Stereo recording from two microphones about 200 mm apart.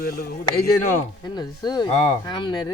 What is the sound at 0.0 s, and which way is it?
Speech, 50° left (ahead or behind).